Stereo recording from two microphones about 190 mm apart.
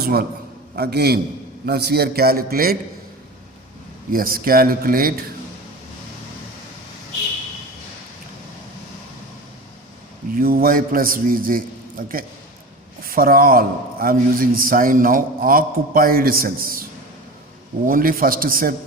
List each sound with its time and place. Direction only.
0.0 s a man's voice: 55° right (ahead or behind)
4.1 s a man's voice: 50° right (ahead or behind)
10.3 s a man's voice: 50° right (ahead or behind)
17.8 s a man's voice: 50° right (ahead or behind)